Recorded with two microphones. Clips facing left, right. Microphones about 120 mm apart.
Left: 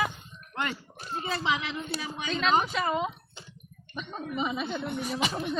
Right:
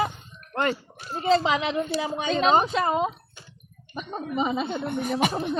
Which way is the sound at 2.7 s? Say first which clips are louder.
Right 5 dB; 40° right (ahead or behind).